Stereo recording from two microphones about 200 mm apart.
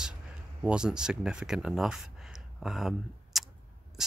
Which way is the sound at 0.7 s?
5° right (ahead or behind).